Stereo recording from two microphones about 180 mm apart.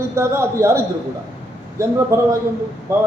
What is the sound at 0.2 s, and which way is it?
Speech, 15° right (ahead or behind).